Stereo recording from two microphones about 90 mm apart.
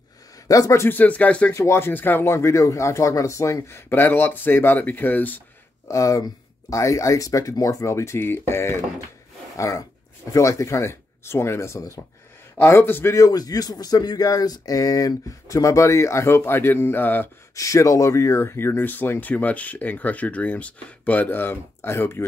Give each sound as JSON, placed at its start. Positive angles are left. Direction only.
{"t": 0.5, "sound": "speech", "side_deg": 40}
{"t": 0.8, "sound": "speech", "side_deg": 20}
{"t": 1.5, "sound": "speech", "side_deg": 30}
{"t": 5.9, "sound": "speech", "side_deg": 40}
{"t": 9.6, "sound": "speech", "side_deg": 40}
{"t": 13.2, "sound": "speech", "side_deg": 45}
{"t": 17.6, "sound": "speech", "side_deg": 35}